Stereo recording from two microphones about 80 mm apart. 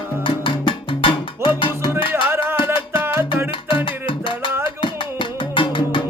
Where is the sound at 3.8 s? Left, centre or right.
Left.